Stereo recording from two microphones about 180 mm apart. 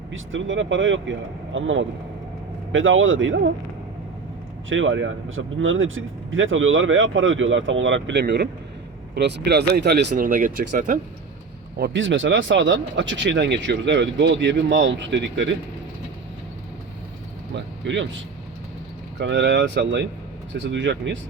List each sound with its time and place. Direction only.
0.1 s speech: 90° right
4.7 s speech: 90° right; by 10.2 s 70° right (ahead or behind)
10.2 s speech: 50° right (ahead or behind)
11.9 s speech: 90° right
17.5 s speech: 90° right
19.2 s speech: 75° right (ahead or behind)